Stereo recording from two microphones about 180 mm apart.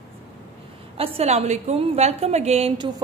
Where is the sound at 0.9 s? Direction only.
35° right (ahead or behind).